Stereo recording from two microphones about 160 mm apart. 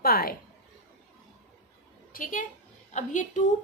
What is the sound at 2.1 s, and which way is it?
A woman's voice, 55° left (ahead or behind).